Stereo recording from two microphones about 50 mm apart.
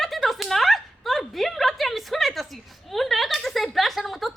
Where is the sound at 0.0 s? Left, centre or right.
Centre.